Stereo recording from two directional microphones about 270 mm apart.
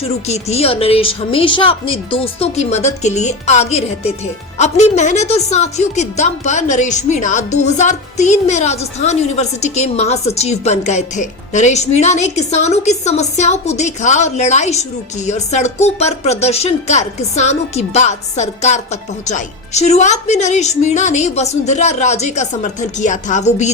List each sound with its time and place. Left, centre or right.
0.0 s speech: left